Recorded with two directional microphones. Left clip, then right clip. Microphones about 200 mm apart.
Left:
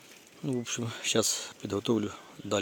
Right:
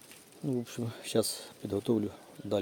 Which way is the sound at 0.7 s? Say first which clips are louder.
Left 5 dB; centre (ahead or behind).